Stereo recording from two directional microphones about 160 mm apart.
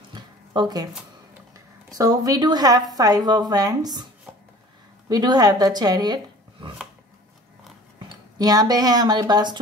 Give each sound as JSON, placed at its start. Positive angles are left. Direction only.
{"t": 0.1, "sound": "zipper", "side_deg": -25}
{"t": 1.9, "sound": "a woman's voice", "side_deg": -20}
{"t": 8.1, "sound": "speech", "side_deg": -25}